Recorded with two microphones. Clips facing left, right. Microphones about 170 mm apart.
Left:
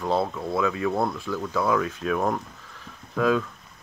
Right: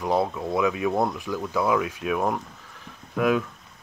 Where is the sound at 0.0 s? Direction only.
15° right (ahead or behind).